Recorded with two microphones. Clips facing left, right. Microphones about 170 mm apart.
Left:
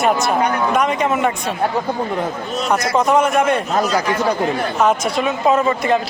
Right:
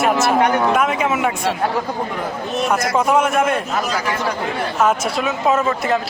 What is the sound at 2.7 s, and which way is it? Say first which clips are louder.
Speech: left 2 dB; 5° right (ahead or behind).